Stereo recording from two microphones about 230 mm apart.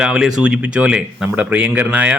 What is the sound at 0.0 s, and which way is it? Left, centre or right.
Speech, centre.